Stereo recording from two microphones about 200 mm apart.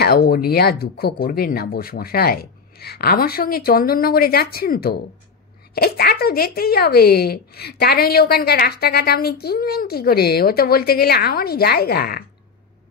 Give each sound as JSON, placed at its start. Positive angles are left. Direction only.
{"t": 0.0, "sound": "a woman's voice", "side_deg": 50}